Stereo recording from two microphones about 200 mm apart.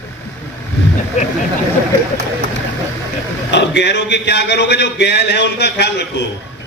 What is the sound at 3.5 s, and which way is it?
A man's voice, 60° left (ahead or behind).